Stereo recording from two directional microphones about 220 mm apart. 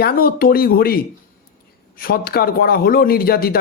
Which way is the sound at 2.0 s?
45° left (ahead or behind).